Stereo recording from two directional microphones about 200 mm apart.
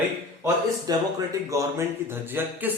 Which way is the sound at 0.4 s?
15° right (ahead or behind).